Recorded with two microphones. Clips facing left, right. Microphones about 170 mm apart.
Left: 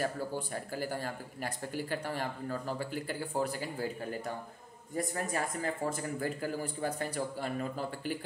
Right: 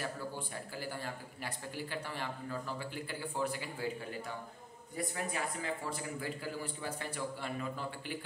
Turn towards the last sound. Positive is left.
turn(degrees=40)  # may be behind; listen again after turning